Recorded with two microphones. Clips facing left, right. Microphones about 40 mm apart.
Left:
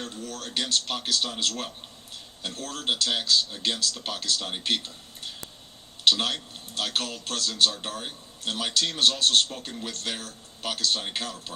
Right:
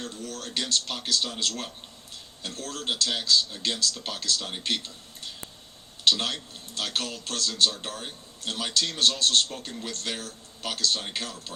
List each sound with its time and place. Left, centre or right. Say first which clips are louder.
0.0 s a man's voice: even; centre